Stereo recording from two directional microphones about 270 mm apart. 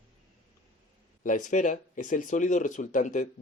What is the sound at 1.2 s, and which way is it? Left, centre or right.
Speech, left.